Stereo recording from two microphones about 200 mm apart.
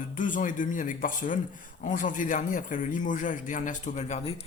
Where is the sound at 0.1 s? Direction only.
40° left (ahead or behind).